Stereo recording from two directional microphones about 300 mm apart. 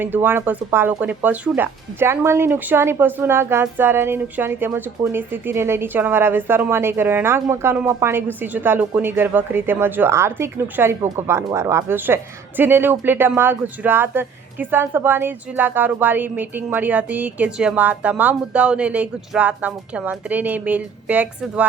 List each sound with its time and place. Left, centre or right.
0.0 s speech: centre